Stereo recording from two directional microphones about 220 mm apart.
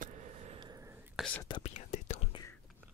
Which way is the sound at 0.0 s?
35° right (ahead or behind).